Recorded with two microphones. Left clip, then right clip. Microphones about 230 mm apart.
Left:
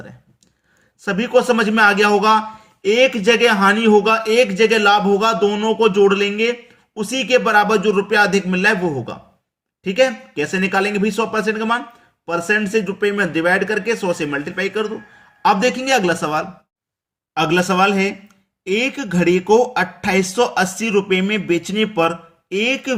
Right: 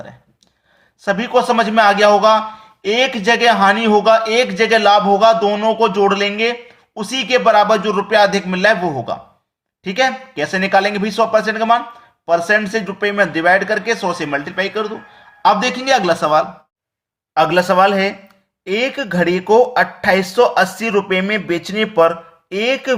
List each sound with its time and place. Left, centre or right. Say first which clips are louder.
1.0 s a man's voice: right 1 dB; centre